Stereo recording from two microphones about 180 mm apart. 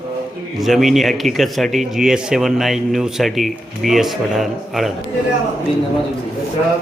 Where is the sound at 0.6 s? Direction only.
Centre (ahead or behind).